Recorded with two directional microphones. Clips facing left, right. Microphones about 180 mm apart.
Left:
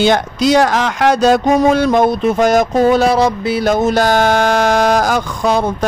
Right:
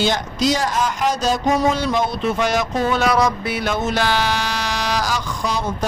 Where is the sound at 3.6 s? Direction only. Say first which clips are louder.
Left 8 dB; 40° left (ahead or behind).